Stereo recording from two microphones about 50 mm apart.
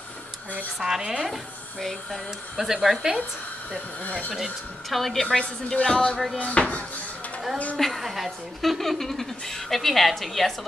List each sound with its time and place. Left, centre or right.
0.7 s speech: centre
1.8 s speech: centre
4.3 s speech: centre
6.3 s speech: left
7.7 s speech: centre